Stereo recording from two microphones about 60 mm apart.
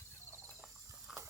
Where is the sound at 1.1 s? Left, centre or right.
Centre.